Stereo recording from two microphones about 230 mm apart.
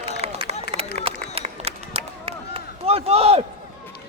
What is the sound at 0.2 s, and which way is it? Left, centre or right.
Run, right.